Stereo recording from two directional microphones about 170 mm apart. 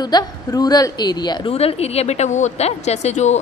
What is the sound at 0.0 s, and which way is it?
A woman's voice, 25° left (ahead or behind).